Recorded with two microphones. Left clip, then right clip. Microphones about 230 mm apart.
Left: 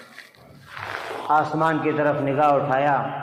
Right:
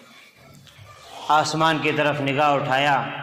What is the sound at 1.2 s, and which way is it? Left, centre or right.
A man's voice, right.